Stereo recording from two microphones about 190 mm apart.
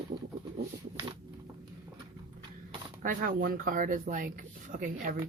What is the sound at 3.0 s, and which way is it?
Speech, 50° right (ahead or behind).